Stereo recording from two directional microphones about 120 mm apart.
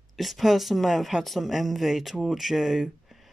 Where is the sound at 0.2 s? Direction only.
Centre (ahead or behind).